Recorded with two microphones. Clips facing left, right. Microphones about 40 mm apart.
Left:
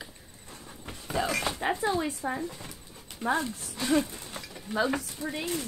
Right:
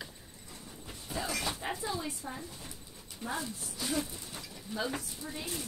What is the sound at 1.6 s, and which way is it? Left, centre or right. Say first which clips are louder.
Speech: left 8 dB; left.